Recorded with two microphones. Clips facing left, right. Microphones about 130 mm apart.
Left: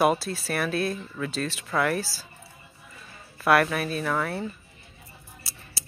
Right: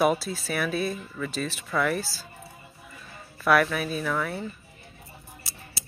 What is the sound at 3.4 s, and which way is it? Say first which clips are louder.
Speech: left 1 dB; 5° left (ahead or behind).